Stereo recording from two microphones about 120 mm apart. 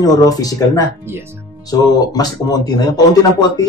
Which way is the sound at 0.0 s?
30° left (ahead or behind).